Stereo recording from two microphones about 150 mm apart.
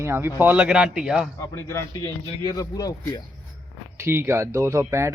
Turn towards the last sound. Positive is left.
turn(degrees=-15)  # may be behind; listen again after turning